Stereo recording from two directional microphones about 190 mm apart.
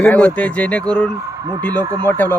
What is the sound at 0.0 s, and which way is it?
A man's voice, 5° left (ahead or behind).